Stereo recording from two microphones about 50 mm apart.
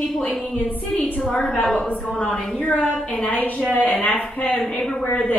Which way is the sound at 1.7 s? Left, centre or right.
Left.